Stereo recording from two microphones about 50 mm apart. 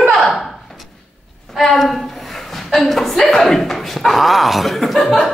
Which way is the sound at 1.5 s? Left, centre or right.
Centre.